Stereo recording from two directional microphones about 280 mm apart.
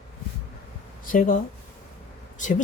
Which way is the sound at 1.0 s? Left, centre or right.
Left.